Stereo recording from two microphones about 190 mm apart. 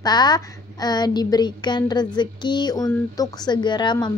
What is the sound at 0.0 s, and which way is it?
A woman's voice, 20° left (ahead or behind).